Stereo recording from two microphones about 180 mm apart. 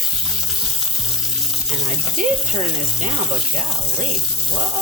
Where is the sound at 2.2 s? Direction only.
50° right (ahead or behind).